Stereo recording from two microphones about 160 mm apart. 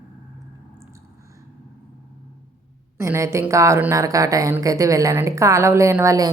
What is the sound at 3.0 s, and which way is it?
A woman's voice, 20° right (ahead or behind).